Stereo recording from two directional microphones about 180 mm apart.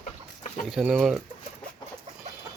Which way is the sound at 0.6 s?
Centre (ahead or behind).